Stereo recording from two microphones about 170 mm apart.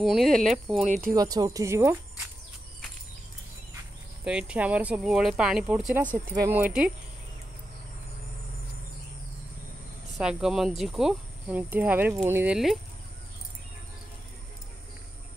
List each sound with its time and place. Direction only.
0.0 s speech: centre (ahead or behind)
0.8 s speech: 45° right (ahead or behind)
1.1 s speech: 20° right (ahead or behind)
4.2 s speech: 5° right (ahead or behind)
10.1 s speech: centre (ahead or behind)